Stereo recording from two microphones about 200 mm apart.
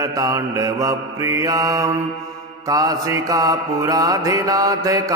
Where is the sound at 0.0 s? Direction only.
15° right (ahead or behind).